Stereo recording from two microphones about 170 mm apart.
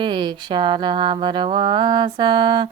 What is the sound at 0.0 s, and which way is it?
Speech, 25° right (ahead or behind).